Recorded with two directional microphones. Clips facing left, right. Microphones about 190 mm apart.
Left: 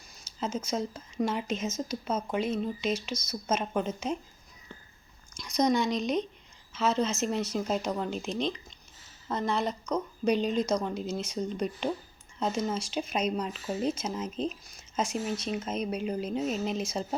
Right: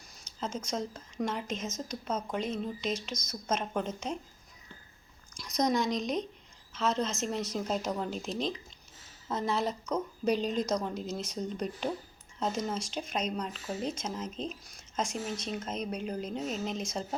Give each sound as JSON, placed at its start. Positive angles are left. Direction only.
{"t": 0.3, "sound": "speech", "side_deg": 5}
{"t": 5.4, "sound": "speech", "side_deg": 0}